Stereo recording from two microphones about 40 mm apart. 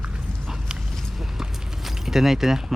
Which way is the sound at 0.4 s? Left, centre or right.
Centre.